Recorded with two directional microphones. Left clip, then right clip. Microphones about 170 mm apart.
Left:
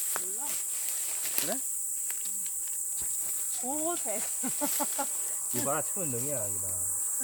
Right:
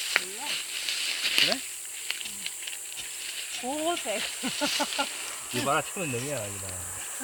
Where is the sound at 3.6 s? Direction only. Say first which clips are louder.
Right 5 dB; 10° left (ahead or behind).